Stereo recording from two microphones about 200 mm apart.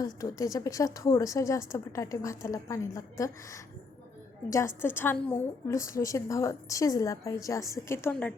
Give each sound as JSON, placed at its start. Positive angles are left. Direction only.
{"t": 0.0, "sound": "a woman's voice", "side_deg": 15}